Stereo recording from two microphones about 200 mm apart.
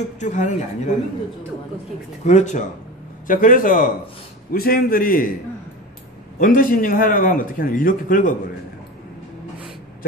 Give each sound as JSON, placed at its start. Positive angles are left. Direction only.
{"t": 0.2, "sound": "speech", "side_deg": 40}
{"t": 2.2, "sound": "a man's voice", "side_deg": 35}
{"t": 6.4, "sound": "a man's voice", "side_deg": 45}